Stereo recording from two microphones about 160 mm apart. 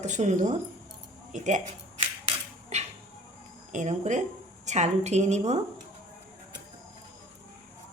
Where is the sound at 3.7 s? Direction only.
50° right (ahead or behind).